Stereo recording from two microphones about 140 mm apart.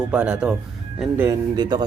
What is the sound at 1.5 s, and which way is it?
Speech, 30° right (ahead or behind).